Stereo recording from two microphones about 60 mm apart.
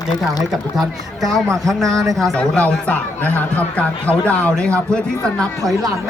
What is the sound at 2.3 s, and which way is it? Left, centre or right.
Speech, left.